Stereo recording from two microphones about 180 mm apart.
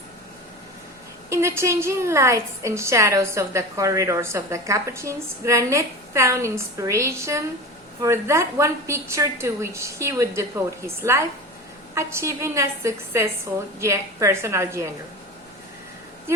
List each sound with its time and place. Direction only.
1.3 s a woman's voice: 15° right (ahead or behind)